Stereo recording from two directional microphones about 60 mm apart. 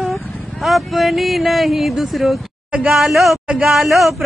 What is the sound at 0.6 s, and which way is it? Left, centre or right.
Speech, centre.